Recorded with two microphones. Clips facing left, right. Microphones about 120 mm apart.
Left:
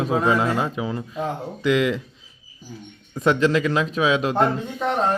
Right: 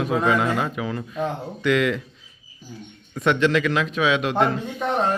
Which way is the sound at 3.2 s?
35° left (ahead or behind).